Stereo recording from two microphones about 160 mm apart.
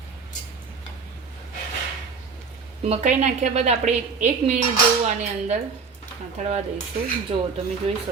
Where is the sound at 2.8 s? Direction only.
40° right (ahead or behind).